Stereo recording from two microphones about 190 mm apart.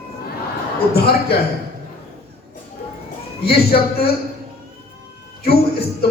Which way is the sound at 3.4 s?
55° left (ahead or behind).